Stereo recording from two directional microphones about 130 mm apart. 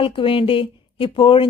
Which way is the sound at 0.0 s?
45° left (ahead or behind).